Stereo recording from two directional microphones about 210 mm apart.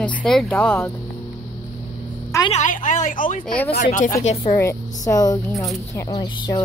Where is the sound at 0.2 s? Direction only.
5° left (ahead or behind).